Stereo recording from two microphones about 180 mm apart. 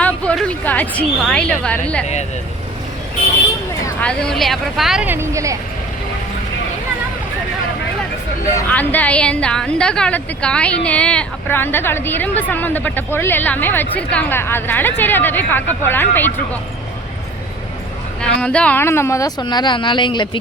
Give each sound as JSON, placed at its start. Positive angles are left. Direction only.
{"t": 0.0, "sound": "a woman's voice", "side_deg": 5}
{"t": 3.8, "sound": "speech", "side_deg": 5}
{"t": 8.5, "sound": "a woman's voice", "side_deg": 10}
{"t": 18.2, "sound": "a woman's voice", "side_deg": 5}